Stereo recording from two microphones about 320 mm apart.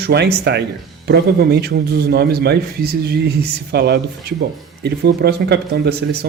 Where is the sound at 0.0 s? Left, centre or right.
Right.